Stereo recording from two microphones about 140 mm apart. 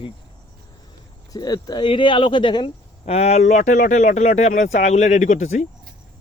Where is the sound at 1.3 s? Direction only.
30° left (ahead or behind).